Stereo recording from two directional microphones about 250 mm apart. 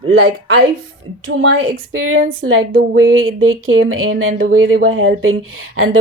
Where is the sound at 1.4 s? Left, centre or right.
Right.